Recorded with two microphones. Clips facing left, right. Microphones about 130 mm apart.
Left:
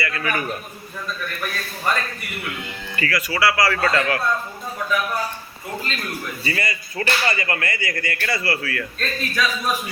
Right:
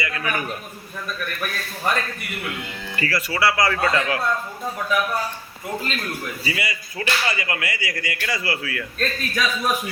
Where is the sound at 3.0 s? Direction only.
30° right (ahead or behind).